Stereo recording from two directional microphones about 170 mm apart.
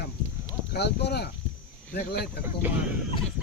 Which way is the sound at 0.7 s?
75° left (ahead or behind).